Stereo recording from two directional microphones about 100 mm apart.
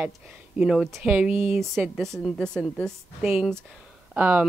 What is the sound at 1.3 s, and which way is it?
Speech, 20° right (ahead or behind).